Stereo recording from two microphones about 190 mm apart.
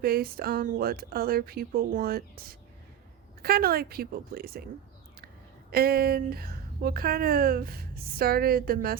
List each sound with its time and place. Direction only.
0.0 s a woman's voice: 55° right (ahead or behind)
5.7 s a woman's voice: 55° right (ahead or behind)